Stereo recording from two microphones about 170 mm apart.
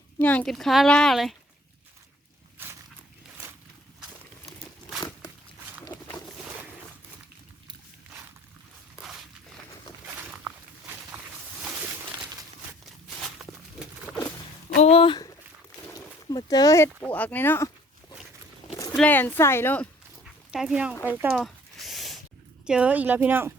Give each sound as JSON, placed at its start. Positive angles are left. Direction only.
{"t": 0.2, "sound": "speech", "side_deg": 10}
{"t": 2.6, "sound": "walk", "side_deg": -15}
{"t": 5.8, "sound": "boat", "side_deg": 10}
{"t": 13.4, "sound": "a sound", "side_deg": 0}
{"t": 14.8, "sound": "a sound", "side_deg": 35}
{"t": 16.0, "sound": "speech", "side_deg": 20}
{"t": 18.9, "sound": "a woman's voice", "side_deg": 10}
{"t": 20.5, "sound": "a woman's voice", "side_deg": -5}
{"t": 21.4, "sound": "a sound", "side_deg": 0}
{"t": 22.6, "sound": "a woman's voice", "side_deg": -5}